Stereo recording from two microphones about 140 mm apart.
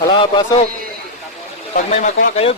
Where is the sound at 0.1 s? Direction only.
35° left (ahead or behind).